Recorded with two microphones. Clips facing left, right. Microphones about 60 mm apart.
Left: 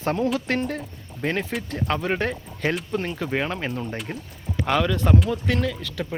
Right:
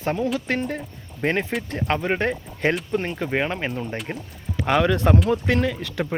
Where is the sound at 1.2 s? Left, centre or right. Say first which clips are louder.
Right 3 dB; right.